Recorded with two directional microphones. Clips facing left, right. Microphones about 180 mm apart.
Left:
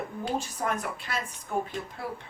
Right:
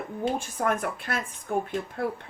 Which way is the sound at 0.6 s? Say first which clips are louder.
Right 4 dB; 60° right (ahead or behind).